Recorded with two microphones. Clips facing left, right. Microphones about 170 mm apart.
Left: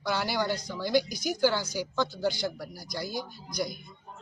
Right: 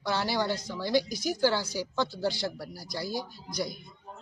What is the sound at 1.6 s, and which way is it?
Speech, 30° right (ahead or behind).